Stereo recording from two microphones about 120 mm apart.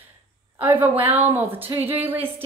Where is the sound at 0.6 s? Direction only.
15° right (ahead or behind).